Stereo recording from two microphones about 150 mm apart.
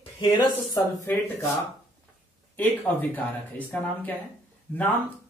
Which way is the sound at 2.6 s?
10° left (ahead or behind).